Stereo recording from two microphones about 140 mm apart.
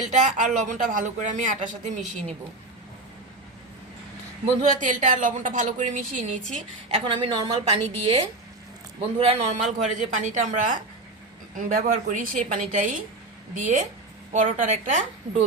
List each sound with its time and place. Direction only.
0.1 s speech: 60° right (ahead or behind)
4.6 s speech: 65° right (ahead or behind)
6.5 s a woman's voice: 45° right (ahead or behind)